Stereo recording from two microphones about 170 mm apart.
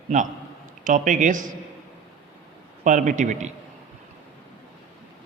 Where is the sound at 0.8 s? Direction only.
50° right (ahead or behind).